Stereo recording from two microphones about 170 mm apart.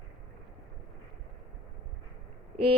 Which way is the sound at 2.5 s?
35° right (ahead or behind).